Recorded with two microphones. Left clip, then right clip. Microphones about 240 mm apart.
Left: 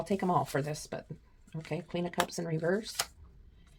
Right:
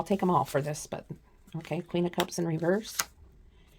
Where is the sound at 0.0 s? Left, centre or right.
Right.